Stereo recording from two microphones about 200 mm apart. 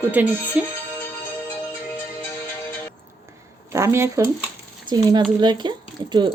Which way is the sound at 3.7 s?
15° right (ahead or behind).